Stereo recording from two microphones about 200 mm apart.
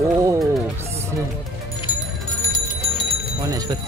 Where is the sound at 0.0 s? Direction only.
15° right (ahead or behind).